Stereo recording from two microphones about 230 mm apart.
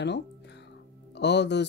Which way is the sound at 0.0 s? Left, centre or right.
Left.